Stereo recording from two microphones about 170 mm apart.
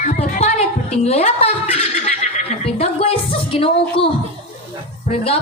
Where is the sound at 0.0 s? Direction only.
40° left (ahead or behind).